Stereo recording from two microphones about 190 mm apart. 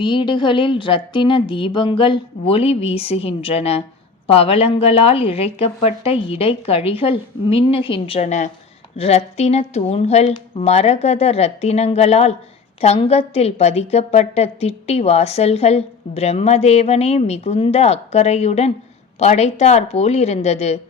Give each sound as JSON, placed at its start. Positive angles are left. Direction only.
{"t": 0.0, "sound": "a woman's voice", "side_deg": 25}